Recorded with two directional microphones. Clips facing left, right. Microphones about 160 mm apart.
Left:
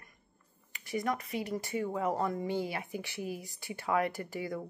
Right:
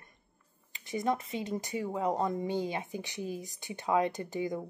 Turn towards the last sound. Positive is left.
turn(degrees=-20)  # may be behind; listen again after turning